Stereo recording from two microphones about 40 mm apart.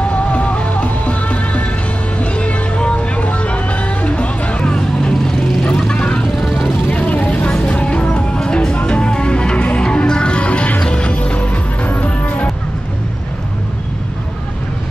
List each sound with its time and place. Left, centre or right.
0.1 s music: left
5.6 s vehicle: left
6.3 s music: centre
6.9 s vehicle: left
7.6 s music: left
9.8 s music: left